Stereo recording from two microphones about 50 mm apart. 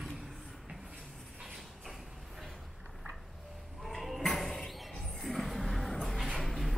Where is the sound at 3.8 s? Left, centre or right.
Centre.